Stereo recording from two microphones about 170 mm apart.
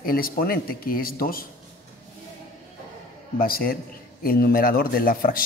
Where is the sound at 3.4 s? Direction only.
60° left (ahead or behind).